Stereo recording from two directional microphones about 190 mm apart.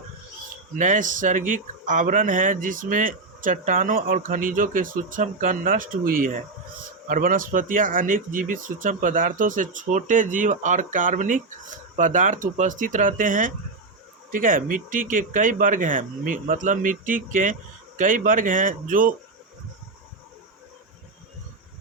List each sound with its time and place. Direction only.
0.8 s speech: 45° right (ahead or behind)